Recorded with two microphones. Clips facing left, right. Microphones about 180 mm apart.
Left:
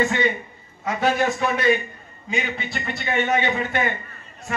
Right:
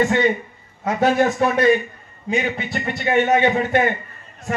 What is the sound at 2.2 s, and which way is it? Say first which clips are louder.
A man's voice: right 5 dB; 45° right (ahead or behind).